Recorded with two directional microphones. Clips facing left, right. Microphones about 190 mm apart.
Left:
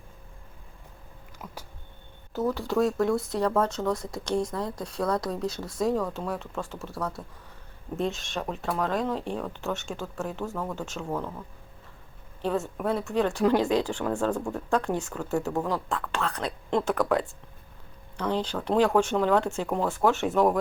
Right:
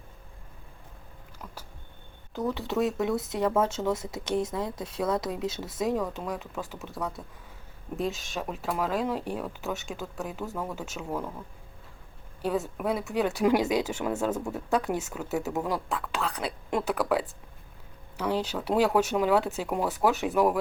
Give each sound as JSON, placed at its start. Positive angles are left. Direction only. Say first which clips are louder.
{"t": 1.4, "sound": "a sound", "louder": "left 2 dB", "side_deg": 5}
{"t": 2.3, "sound": "speech", "louder": "left 3 dB", "side_deg": 0}
{"t": 12.4, "sound": "speech", "louder": "left 1 dB", "side_deg": -5}
{"t": 14.8, "sound": "speech", "louder": "left 1 dB", "side_deg": -20}
{"t": 15.2, "sound": "speech", "louder": "left 2 dB", "side_deg": -5}